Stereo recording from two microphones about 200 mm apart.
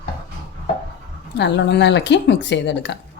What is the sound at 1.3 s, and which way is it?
A woman's voice, 60° left (ahead or behind).